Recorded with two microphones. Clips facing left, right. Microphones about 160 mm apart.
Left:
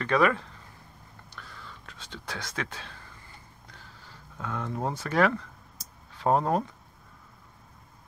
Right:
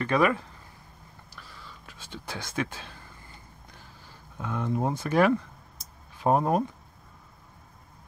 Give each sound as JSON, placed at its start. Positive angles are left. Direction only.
{"t": 0.0, "sound": "speech", "side_deg": -15}
{"t": 1.9, "sound": "speech", "side_deg": -10}
{"t": 4.4, "sound": "speech", "side_deg": -15}